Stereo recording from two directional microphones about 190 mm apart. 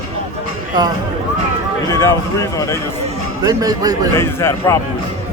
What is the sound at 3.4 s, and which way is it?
Speech, 20° right (ahead or behind).